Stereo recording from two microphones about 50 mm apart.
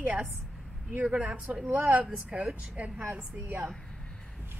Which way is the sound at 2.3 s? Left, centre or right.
Right.